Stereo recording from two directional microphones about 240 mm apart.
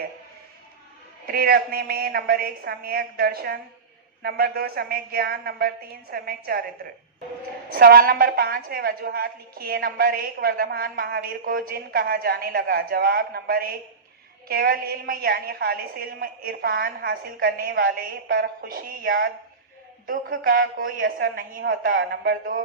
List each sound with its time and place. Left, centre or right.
1.3 s a woman's voice: right
7.7 s a woman's voice: right